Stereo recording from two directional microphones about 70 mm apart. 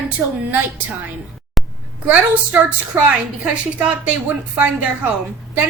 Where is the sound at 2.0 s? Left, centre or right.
Right.